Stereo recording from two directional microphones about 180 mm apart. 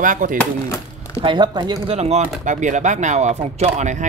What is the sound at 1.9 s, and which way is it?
Speech, 35° right (ahead or behind).